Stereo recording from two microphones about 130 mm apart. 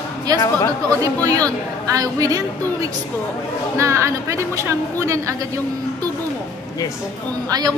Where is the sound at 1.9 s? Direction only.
25° right (ahead or behind).